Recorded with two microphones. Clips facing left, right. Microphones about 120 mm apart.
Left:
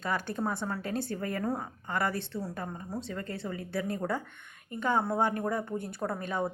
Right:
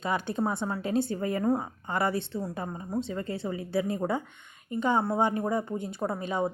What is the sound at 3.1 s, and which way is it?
A woman's voice, 25° right (ahead or behind).